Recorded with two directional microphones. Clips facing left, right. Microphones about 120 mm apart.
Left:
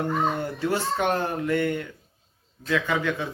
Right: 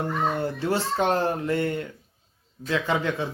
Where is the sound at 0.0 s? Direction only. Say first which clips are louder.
Even; 30° right (ahead or behind).